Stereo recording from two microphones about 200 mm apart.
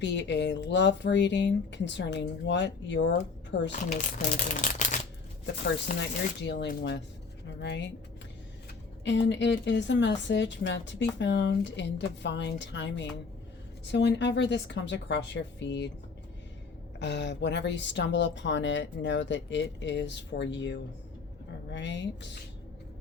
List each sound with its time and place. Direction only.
0.0 s speech: 60° left (ahead or behind)
4.4 s speech: 40° left (ahead or behind)
6.0 s speech: 60° left (ahead or behind)
9.0 s speech: 65° left (ahead or behind)
17.0 s speech: 60° left (ahead or behind)